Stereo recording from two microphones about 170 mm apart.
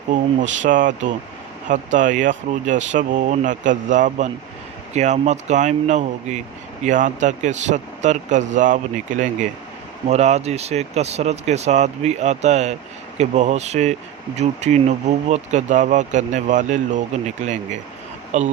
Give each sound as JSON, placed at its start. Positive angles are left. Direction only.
{"t": 0.6, "sound": "speech", "side_deg": -50}